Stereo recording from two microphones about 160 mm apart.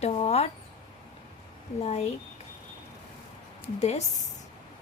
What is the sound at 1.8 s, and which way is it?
Speech, 40° left (ahead or behind).